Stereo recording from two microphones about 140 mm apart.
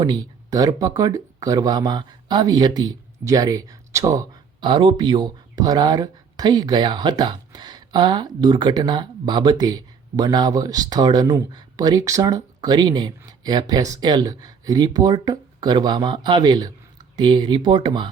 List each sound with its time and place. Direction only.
0.0 s speech: 30° right (ahead or behind)